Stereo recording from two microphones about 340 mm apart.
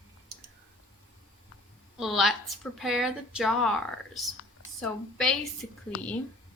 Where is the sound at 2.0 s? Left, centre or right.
Centre.